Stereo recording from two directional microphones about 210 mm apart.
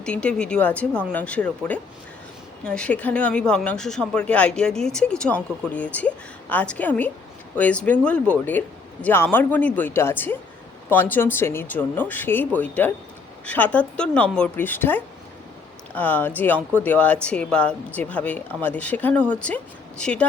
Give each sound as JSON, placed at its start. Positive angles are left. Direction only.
{"t": 0.0, "sound": "speech", "side_deg": 5}